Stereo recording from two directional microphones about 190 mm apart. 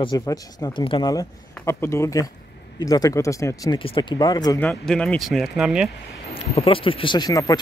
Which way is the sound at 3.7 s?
25° left (ahead or behind).